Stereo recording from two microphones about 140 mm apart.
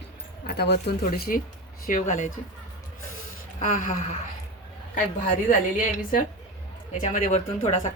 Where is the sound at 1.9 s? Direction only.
65° left (ahead or behind).